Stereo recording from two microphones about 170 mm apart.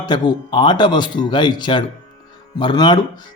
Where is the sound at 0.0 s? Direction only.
25° left (ahead or behind).